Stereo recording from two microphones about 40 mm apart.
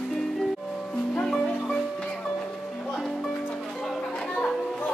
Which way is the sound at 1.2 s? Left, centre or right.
Centre.